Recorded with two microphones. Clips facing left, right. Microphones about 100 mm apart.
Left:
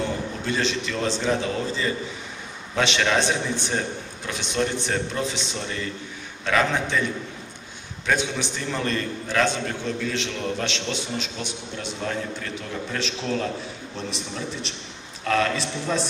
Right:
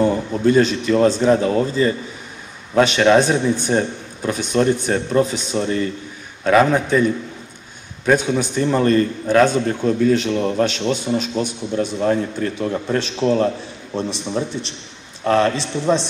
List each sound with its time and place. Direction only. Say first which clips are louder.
0.0 s a man's voice: right 11 dB; 45° right (ahead or behind)
8.1 s a man's voice: right 8 dB; 45° right (ahead or behind)
15.2 s a man's voice: right 6 dB; 30° right (ahead or behind)